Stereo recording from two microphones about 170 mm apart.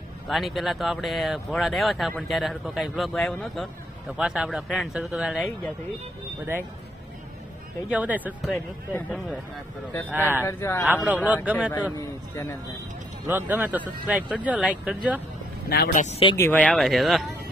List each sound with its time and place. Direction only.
0.3 s speech: centre (ahead or behind)
7.9 s speech: 10° right (ahead or behind)
8.9 s speech: 10° left (ahead or behind)
10.0 s speech: 10° right (ahead or behind)
10.4 s speech: 15° left (ahead or behind)
11.2 s speech: 10° right (ahead or behind)
13.3 s speech: 10° right (ahead or behind)
15.7 s speech: 65° left (ahead or behind)
16.0 s speech: 40° left (ahead or behind)
16.3 s speech: 10° left (ahead or behind)